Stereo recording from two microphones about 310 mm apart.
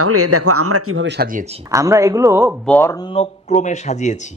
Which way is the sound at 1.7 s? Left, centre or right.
Centre.